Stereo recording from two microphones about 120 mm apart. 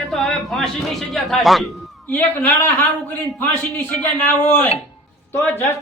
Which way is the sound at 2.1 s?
15° left (ahead or behind).